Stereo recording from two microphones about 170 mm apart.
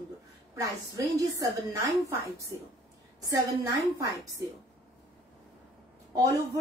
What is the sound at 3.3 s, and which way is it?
Speech, 20° right (ahead or behind).